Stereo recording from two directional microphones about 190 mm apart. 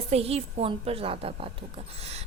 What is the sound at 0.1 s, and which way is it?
A woman's voice, 30° right (ahead or behind).